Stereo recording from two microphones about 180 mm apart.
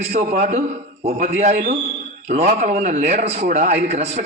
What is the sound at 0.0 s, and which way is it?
Speech, 60° right (ahead or behind).